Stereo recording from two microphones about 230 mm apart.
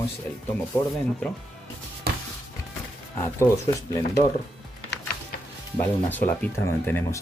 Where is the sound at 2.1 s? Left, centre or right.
Right.